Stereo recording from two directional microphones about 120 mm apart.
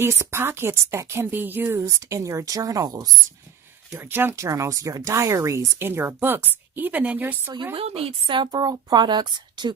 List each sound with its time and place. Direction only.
0.0 s speech: 20° right (ahead or behind)
3.9 s speech: 20° right (ahead or behind)
7.8 s speech: 55° right (ahead or behind); by 9.7 s 40° right (ahead or behind)